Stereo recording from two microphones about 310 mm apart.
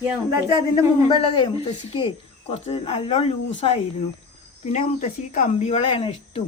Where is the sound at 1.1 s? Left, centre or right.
Centre.